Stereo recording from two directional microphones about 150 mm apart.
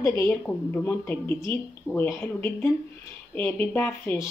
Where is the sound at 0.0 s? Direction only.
15° left (ahead or behind).